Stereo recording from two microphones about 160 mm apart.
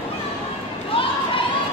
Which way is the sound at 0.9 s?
35° left (ahead or behind).